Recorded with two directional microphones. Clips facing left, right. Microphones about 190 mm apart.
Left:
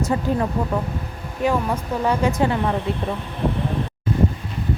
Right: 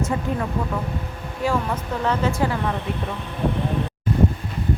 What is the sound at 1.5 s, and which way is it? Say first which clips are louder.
Speech: left 2 dB; 15° left (ahead or behind).